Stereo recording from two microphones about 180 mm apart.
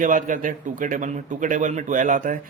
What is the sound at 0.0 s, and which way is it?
Speech, 45° right (ahead or behind).